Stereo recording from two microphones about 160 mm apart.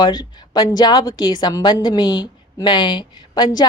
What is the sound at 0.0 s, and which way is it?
A woman's voice, 25° left (ahead or behind).